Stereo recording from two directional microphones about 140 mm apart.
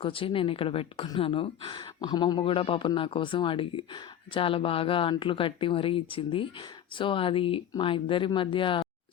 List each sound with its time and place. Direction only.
0.0 s a woman's voice: 40° left (ahead or behind)